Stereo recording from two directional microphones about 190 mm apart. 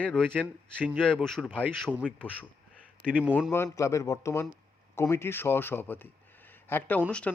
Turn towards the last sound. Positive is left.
turn(degrees=5)  # may be behind; listen again after turning